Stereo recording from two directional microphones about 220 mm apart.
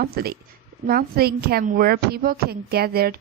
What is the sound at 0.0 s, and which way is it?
A woman's voice, 45° right (ahead or behind).